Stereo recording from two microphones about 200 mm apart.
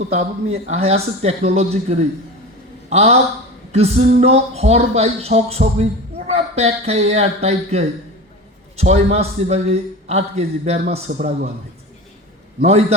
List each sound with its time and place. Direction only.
0.0 s speech: 30° right (ahead or behind)